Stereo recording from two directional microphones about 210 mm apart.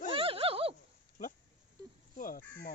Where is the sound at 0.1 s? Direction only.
25° right (ahead or behind).